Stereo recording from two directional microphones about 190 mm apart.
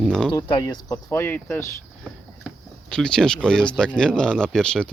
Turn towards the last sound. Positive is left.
turn(degrees=5)  # may be behind; listen again after turning